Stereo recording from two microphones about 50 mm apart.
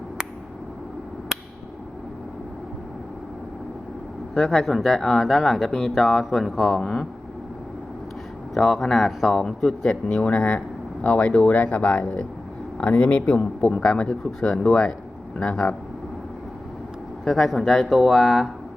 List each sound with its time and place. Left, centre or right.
4.4 s speech: centre
6.8 s speech: centre
8.5 s a man's voice: centre
17.2 s speech: centre